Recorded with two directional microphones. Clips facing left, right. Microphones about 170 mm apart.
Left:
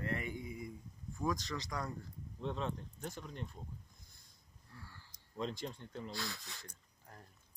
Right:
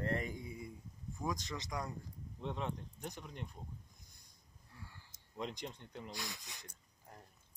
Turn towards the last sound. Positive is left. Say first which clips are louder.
# left 1 dB
turn(degrees=-20)  # may be behind; listen again after turning